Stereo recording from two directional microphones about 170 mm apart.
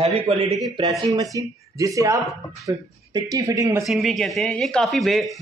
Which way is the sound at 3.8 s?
Centre (ahead or behind).